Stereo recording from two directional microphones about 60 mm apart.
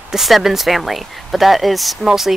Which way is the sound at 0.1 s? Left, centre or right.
Centre.